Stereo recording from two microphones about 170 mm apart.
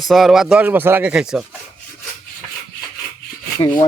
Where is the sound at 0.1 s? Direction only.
Centre (ahead or behind).